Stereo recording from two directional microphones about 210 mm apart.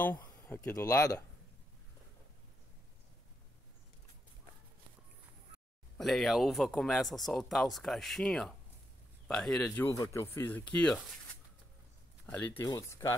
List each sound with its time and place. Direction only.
0.0 s speech: 10° left (ahead or behind)
5.9 s speech: centre (ahead or behind)
12.4 s speech: 15° left (ahead or behind)